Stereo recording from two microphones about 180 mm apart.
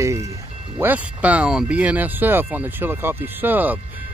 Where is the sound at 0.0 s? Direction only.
15° right (ahead or behind).